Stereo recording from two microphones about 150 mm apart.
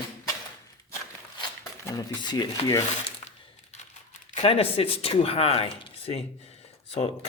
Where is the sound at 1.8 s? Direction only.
25° left (ahead or behind).